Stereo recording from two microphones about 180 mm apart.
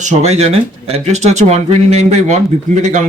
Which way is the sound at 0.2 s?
35° right (ahead or behind).